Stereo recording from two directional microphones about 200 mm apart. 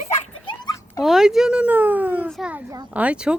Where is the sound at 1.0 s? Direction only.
Centre (ahead or behind).